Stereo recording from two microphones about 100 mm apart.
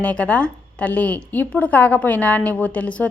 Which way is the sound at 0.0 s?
10° left (ahead or behind).